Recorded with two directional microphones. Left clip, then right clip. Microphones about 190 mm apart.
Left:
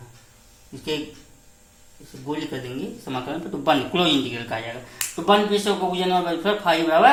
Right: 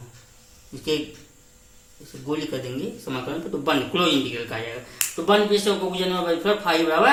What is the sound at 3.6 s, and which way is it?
Speech, 45° left (ahead or behind).